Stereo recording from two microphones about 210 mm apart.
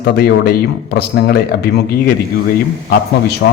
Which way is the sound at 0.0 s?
50° left (ahead or behind).